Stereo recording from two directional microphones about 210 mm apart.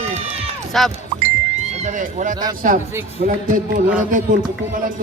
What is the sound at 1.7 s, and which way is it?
A man's voice, 35° right (ahead or behind).